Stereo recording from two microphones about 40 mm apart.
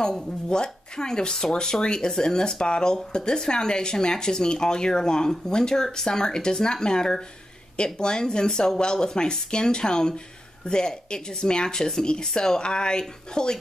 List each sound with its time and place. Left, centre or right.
0.5 s speech: centre